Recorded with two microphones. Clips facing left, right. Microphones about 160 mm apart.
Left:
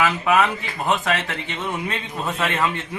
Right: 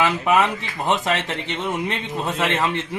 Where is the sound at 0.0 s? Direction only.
20° right (ahead or behind).